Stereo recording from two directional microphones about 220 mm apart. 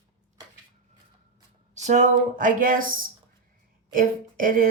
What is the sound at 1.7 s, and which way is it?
Speech, 35° right (ahead or behind).